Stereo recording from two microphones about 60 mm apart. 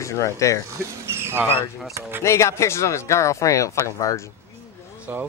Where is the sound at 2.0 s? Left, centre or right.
Right.